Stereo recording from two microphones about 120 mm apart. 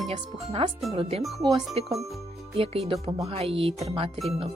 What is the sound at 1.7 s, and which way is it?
Speech, 60° right (ahead or behind).